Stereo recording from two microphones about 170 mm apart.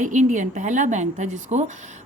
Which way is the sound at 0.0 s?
45° right (ahead or behind).